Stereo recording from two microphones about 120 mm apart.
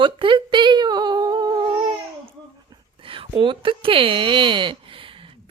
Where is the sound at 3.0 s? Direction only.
50° right (ahead or behind).